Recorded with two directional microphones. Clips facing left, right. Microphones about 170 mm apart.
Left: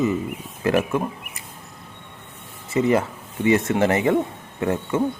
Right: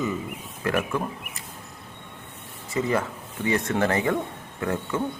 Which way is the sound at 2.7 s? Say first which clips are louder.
Left 6 dB; 20° left (ahead or behind).